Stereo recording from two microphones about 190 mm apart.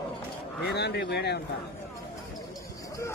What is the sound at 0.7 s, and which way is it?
Speech, 60° left (ahead or behind).